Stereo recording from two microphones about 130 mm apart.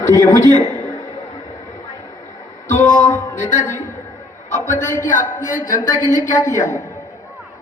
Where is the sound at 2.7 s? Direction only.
75° left (ahead or behind).